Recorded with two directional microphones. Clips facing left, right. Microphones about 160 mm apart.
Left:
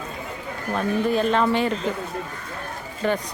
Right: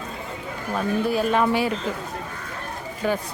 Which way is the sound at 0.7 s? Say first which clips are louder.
Left 1 dB; 5° right (ahead or behind).